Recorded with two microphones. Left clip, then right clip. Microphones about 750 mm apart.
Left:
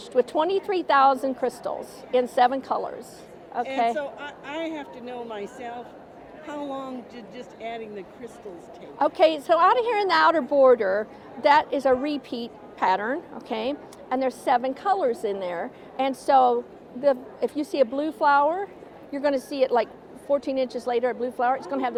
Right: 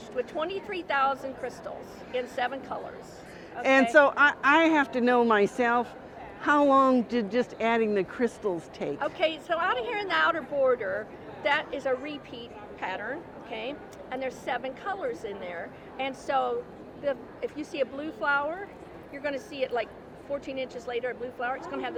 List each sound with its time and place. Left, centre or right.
0.2 s speech: left
3.9 s speech: right
9.0 s a woman's voice: left